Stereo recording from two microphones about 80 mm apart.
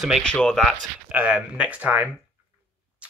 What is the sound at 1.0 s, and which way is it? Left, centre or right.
Speech, centre.